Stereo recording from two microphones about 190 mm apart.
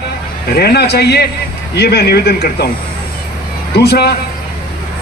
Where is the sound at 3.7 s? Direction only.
55° left (ahead or behind).